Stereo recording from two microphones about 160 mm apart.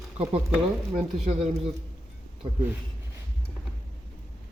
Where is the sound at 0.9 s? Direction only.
40° right (ahead or behind).